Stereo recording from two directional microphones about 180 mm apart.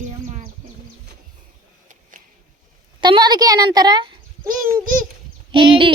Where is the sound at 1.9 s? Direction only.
50° right (ahead or behind).